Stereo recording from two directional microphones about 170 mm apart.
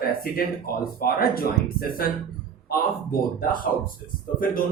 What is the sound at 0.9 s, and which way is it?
Speech, 60° left (ahead or behind).